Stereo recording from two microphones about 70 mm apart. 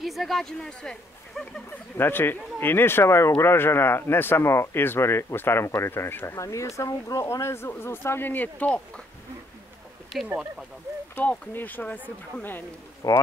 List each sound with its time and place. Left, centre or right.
0.0 s speech: centre
2.0 s a man's voice: left
6.3 s speech: left
7.2 s a man's voice: left; by 9.0 s centre
11.1 s speech: left
13.0 s speech: left